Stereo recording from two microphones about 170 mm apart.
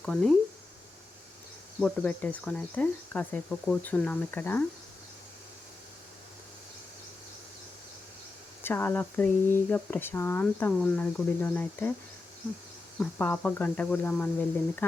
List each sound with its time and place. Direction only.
0.0 s speech: centre (ahead or behind)
1.8 s speech: 10° left (ahead or behind)
8.6 s speech: 10° left (ahead or behind)
13.0 s speech: 10° left (ahead or behind)